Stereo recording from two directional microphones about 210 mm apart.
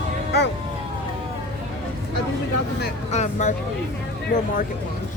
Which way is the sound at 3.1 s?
35° left (ahead or behind).